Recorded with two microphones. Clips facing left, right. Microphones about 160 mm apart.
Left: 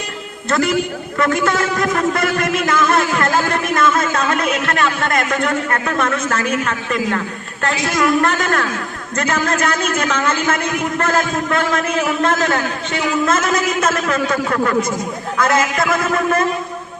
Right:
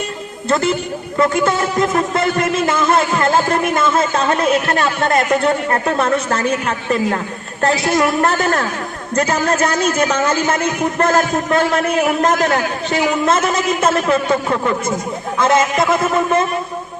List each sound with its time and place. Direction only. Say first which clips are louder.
0.4 s a man's voice: even; 25° right (ahead or behind)